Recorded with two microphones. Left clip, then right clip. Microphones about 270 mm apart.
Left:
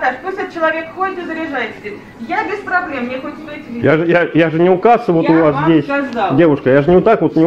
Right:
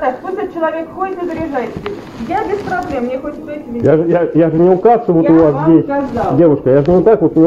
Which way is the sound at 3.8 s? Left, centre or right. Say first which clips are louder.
Right 1 dB; left.